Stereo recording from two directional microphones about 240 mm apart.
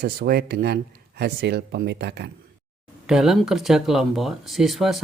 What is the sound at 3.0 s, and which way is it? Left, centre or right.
Speech, centre.